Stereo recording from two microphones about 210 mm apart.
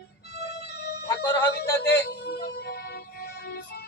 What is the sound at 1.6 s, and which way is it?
Speech, 55° left (ahead or behind).